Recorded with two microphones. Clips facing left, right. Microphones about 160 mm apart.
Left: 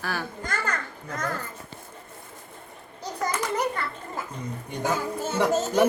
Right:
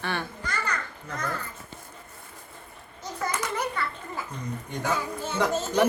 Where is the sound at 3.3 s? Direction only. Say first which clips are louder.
Left 4 dB; 40° left (ahead or behind).